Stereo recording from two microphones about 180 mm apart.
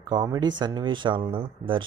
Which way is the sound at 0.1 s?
25° right (ahead or behind).